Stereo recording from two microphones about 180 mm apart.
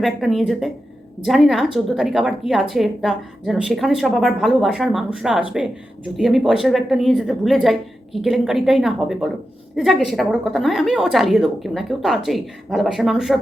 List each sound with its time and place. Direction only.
0.0 s a woman's voice: centre (ahead or behind)